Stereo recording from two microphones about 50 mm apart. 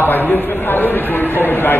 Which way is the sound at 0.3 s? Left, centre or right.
Left.